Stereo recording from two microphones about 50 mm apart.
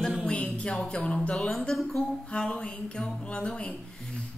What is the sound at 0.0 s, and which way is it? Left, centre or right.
Music, centre.